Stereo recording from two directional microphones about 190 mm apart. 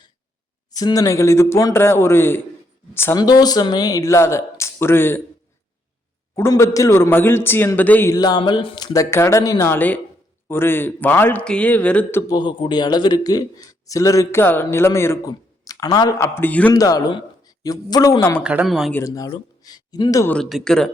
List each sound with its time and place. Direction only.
0.7 s a man's voice: 20° left (ahead or behind)
6.3 s a man's voice: 15° left (ahead or behind)
12.3 s a man's voice: 25° left (ahead or behind); by 16.7 s 10° left (ahead or behind)
16.7 s a man's voice: 20° left (ahead or behind)
18.4 s speech: 5° right (ahead or behind)
18.9 s a man's voice: 15° left (ahead or behind)
20.3 s speech: centre (ahead or behind)